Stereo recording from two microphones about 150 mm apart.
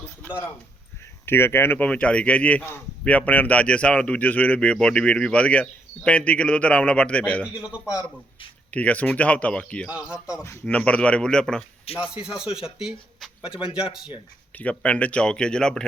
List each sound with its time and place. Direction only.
1.2 s speech: 15° left (ahead or behind)
7.4 s a man's voice: 5° right (ahead or behind)
8.7 s speech: 10° left (ahead or behind)
9.9 s a man's voice: 5° right (ahead or behind)
10.4 s speech: 20° left (ahead or behind)
12.1 s speech: 5° right (ahead or behind)
14.5 s speech: 10° left (ahead or behind)